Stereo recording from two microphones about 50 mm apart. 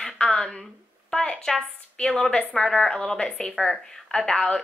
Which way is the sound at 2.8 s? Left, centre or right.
Centre.